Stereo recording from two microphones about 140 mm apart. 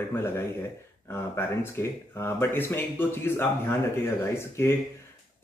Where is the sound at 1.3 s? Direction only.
20° left (ahead or behind).